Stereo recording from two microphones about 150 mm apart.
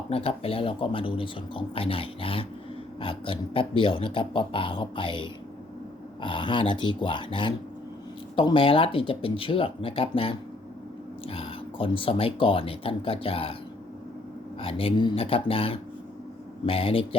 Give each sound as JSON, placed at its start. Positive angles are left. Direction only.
{"t": 0.1, "sound": "speech", "side_deg": 40}
{"t": 14.6, "sound": "speech", "side_deg": 40}